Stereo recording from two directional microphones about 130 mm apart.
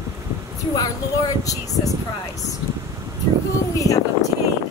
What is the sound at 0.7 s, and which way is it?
A woman's voice, 25° left (ahead or behind).